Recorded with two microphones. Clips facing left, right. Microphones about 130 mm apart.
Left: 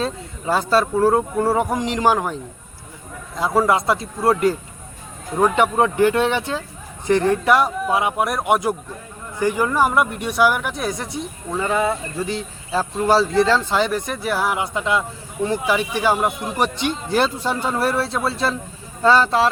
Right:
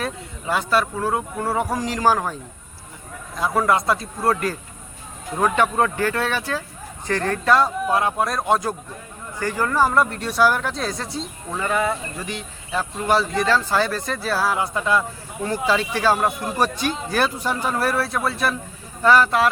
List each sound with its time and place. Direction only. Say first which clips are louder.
0.0 s speech: left 4 dB; 30° left (ahead or behind)
3.3 s speech: left 2 dB; 25° left (ahead or behind)